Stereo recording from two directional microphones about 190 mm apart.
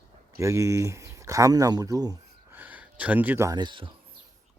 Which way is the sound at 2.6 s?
10° right (ahead or behind).